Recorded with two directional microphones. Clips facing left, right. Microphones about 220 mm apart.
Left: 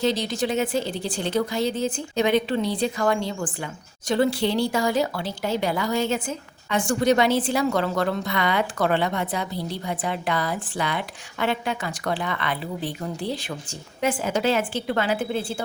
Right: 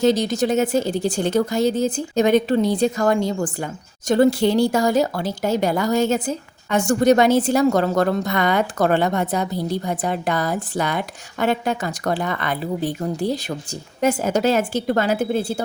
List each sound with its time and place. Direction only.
0.0 s a woman's voice: 45° right (ahead or behind)